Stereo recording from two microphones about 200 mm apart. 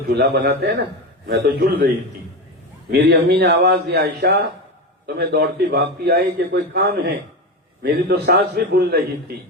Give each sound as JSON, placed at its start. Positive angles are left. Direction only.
{"t": 0.1, "sound": "a man's voice", "side_deg": -50}
{"t": 2.9, "sound": "a man's voice", "side_deg": -50}